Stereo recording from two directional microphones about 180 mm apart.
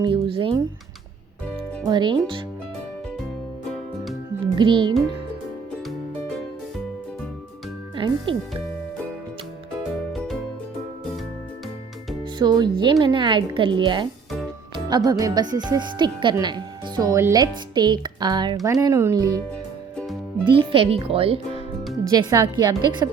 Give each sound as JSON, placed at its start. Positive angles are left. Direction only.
{"t": 0.0, "sound": "music", "side_deg": -30}
{"t": 1.9, "sound": "speech", "side_deg": -25}
{"t": 3.7, "sound": "music", "side_deg": 0}
{"t": 4.5, "sound": "speech", "side_deg": -25}
{"t": 7.9, "sound": "music", "side_deg": -30}
{"t": 10.1, "sound": "music", "side_deg": 0}
{"t": 12.2, "sound": "speech", "side_deg": -25}
{"t": 20.5, "sound": "speech", "side_deg": -30}
{"t": 22.0, "sound": "speech", "side_deg": -20}